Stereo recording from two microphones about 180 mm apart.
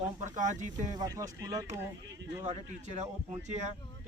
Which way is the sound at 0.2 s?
45° right (ahead or behind).